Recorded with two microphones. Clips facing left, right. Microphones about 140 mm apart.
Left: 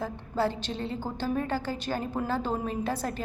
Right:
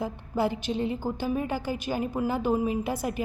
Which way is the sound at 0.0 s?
15° right (ahead or behind).